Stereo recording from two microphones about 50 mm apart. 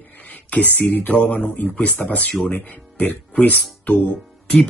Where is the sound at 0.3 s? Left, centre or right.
Left.